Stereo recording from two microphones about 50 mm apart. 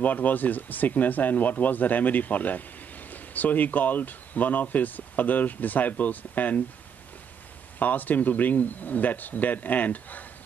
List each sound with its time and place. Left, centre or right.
0.0 s speech: left
7.8 s speech: left